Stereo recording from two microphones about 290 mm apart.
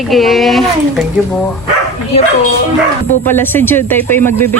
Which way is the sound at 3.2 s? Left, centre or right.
Centre.